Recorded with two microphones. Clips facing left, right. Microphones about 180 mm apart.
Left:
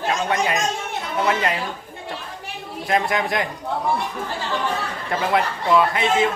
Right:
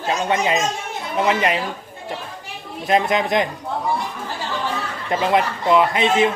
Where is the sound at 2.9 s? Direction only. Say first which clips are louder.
Right 3 dB; 20° right (ahead or behind).